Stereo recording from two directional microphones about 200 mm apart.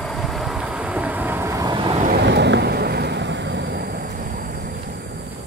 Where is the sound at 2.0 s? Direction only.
50° right (ahead or behind).